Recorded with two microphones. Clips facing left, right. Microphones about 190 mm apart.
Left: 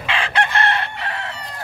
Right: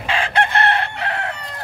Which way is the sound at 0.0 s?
55° right (ahead or behind).